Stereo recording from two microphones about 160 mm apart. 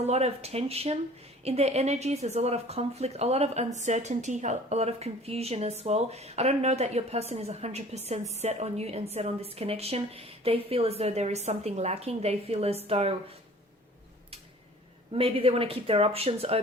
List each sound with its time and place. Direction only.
0.1 s a woman's voice: 40° right (ahead or behind)
15.1 s a woman's voice: 35° right (ahead or behind)